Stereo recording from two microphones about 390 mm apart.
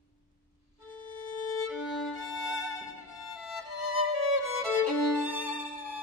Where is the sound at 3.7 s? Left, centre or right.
Left.